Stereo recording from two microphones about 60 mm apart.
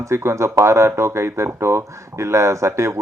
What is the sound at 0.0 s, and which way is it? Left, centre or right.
Speech, right.